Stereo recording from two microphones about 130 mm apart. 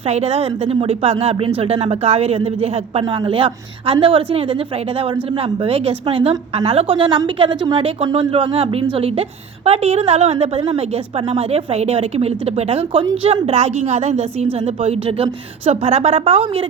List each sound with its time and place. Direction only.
0.0 s speech: 55° right (ahead or behind)